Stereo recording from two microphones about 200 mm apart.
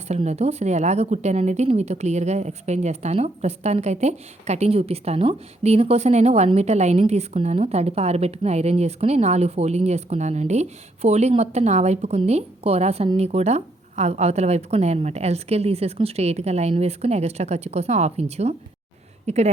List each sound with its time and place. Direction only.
0.1 s speech: 35° right (ahead or behind)